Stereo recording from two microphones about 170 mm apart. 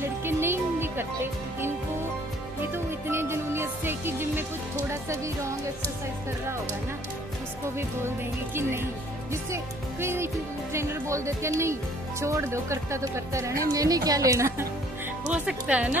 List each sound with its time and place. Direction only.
0.0 s music: 15° right (ahead or behind)
2.7 s music: 15° right (ahead or behind)
8.5 s speech: 15° right (ahead or behind)